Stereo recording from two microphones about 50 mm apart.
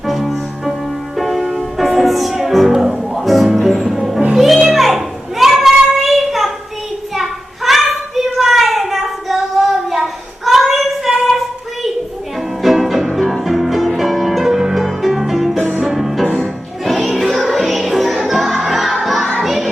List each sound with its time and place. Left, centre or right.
0.1 s music: centre
4.7 s child singing: centre
7.2 s a sound: centre
12.6 s music: centre